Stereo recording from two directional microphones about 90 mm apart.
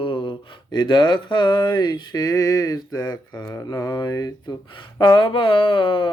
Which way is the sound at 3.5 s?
35° left (ahead or behind).